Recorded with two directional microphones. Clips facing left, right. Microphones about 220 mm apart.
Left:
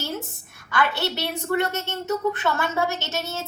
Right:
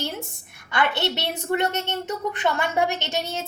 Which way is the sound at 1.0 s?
20° right (ahead or behind).